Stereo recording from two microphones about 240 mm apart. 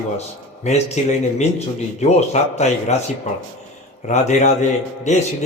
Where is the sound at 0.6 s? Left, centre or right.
Left.